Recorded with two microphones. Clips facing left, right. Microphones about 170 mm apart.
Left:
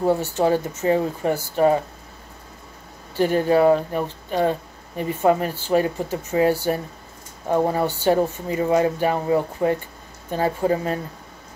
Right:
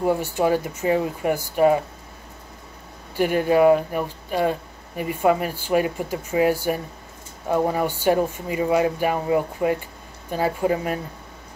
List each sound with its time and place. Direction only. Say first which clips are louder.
0.0 s speech: left 1 dB; 15° right (ahead or behind)
3.2 s speech: even; 15° right (ahead or behind)
7.4 s speech: left 1 dB; 20° left (ahead or behind)
7.7 s speech: left 1 dB; 10° right (ahead or behind)